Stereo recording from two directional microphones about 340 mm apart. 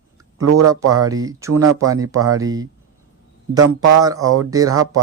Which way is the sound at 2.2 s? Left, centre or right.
Right.